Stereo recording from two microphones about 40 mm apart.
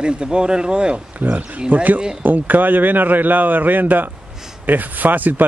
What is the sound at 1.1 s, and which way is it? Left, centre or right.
Speech, right.